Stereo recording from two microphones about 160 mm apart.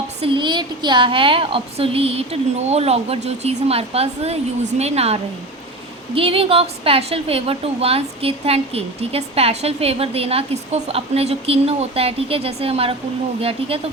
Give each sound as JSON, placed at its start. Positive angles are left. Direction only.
{"t": 0.2, "sound": "a woman's voice", "side_deg": -30}